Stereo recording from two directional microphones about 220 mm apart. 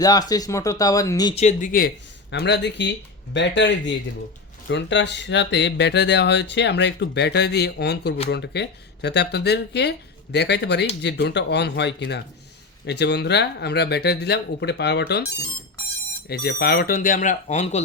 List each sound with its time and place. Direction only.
0.0 s speech: 15° left (ahead or behind)
1.4 s speech: 35° left (ahead or behind)
2.4 s speech: 50° left (ahead or behind)
16.3 s speech: 45° left (ahead or behind)